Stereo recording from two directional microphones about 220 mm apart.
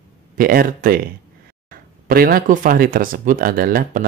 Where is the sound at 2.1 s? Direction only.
40° right (ahead or behind).